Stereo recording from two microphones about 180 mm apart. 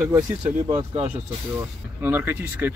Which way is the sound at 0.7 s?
35° right (ahead or behind).